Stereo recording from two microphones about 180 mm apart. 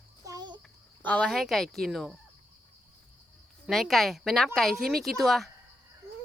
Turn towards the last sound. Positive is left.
turn(degrees=0)  # may be behind; listen again after turning